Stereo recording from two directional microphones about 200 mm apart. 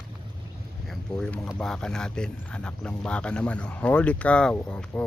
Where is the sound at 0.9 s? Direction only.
Centre (ahead or behind).